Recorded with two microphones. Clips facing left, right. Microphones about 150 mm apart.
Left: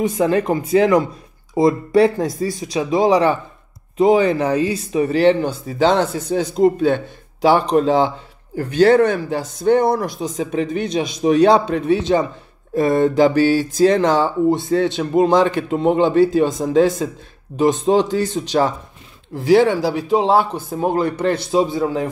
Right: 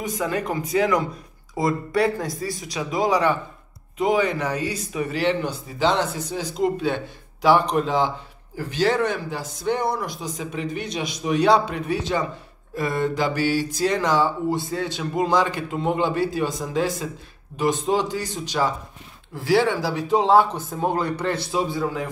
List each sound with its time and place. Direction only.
0.0 s a man's voice: 30° left (ahead or behind)
5.9 s speech: 45° left (ahead or behind)
7.4 s a man's voice: 25° left (ahead or behind)
8.5 s speech: 55° left (ahead or behind)
10.2 s a man's voice: 25° left (ahead or behind)
20.9 s a man's voice: 25° left (ahead or behind)